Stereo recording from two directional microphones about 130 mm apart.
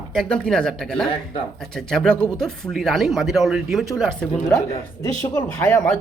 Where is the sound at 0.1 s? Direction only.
5° left (ahead or behind).